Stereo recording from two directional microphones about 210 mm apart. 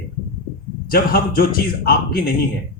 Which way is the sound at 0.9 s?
45° left (ahead or behind).